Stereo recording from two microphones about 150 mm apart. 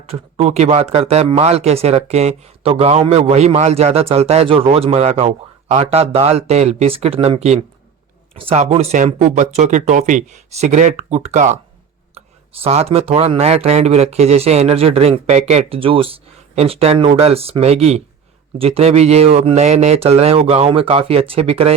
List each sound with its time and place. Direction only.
0.0 s a man's voice: 45° right (ahead or behind)
12.2 s a sound: 45° right (ahead or behind)
12.6 s a man's voice: 40° right (ahead or behind)